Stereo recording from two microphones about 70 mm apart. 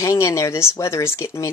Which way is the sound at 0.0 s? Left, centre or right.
Left.